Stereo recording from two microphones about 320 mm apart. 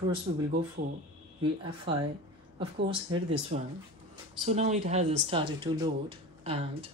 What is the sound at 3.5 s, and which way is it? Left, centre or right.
Speech, right.